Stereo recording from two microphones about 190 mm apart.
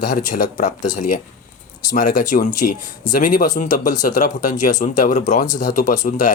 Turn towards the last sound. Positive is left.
turn(degrees=45)  # may be behind; listen again after turning